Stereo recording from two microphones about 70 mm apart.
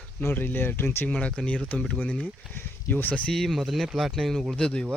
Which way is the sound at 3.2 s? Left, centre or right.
Centre.